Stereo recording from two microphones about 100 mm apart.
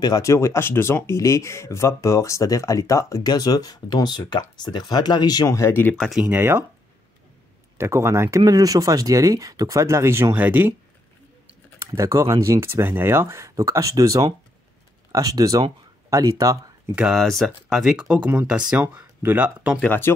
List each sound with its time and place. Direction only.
0.2 s speech: 30° left (ahead or behind)
5.9 s speech: centre (ahead or behind)
6.2 s speech: 20° right (ahead or behind)
7.7 s speech: 30° right (ahead or behind)
11.8 s speech: 30° right (ahead or behind)
16.9 s speech: 5° right (ahead or behind)
19.8 s speech: 20° left (ahead or behind)